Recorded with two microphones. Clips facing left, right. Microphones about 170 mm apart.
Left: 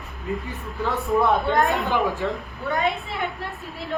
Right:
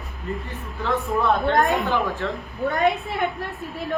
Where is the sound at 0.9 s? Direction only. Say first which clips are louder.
Left 1 dB; 10° left (ahead or behind).